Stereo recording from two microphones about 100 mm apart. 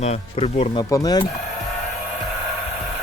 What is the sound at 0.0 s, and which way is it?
Speech, 90° left.